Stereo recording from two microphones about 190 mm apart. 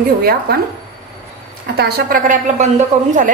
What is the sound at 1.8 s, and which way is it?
Speech, 55° right (ahead or behind).